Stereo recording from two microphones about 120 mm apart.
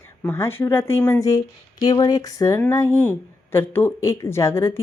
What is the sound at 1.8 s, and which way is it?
A woman's voice, 30° left (ahead or behind).